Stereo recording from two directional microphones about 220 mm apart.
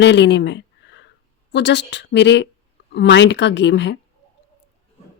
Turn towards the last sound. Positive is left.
turn(degrees=55)  # may be behind; listen again after turning